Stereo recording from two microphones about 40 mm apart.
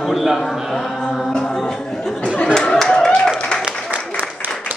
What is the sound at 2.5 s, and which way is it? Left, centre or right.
Clapping, centre.